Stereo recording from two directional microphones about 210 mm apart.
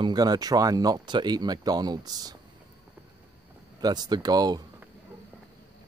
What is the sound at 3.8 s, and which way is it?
Speech, 20° right (ahead or behind).